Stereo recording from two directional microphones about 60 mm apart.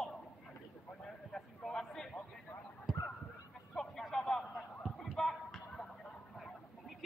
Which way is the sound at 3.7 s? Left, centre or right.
Centre.